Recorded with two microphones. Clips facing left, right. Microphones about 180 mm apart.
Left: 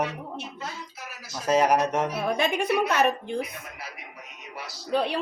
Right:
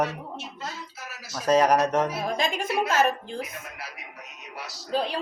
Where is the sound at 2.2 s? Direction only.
65° left (ahead or behind).